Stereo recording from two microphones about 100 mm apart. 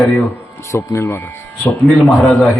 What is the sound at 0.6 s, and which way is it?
Speech, 25° left (ahead or behind).